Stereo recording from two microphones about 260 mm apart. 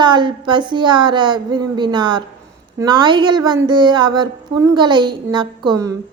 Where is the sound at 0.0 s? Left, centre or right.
Centre.